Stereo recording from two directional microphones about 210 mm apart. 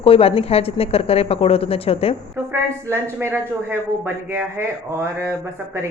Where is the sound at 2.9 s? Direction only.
15° right (ahead or behind).